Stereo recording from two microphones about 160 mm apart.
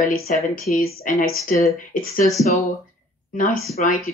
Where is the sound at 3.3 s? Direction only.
55° left (ahead or behind).